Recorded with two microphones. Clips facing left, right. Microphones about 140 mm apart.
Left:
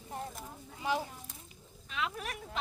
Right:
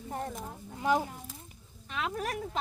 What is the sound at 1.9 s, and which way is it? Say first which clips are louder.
Speech: right 4 dB; 45° right (ahead or behind).